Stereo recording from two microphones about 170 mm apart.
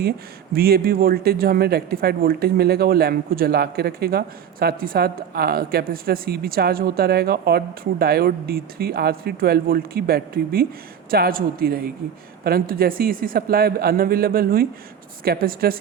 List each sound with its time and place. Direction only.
0.5 s speech: 65° right (ahead or behind)